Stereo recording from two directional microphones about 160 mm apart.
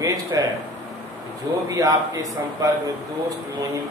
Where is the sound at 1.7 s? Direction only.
20° right (ahead or behind).